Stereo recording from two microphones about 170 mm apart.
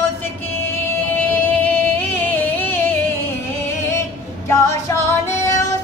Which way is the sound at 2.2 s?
10° left (ahead or behind).